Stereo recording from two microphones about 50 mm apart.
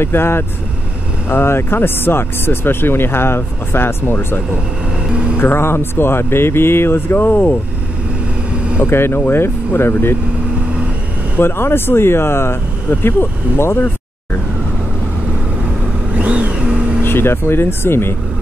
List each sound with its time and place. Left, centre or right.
0.0 s speech: left
5.4 s speech: left
8.7 s speech: left
11.3 s speech: left
16.2 s vehicle: right
17.0 s speech: left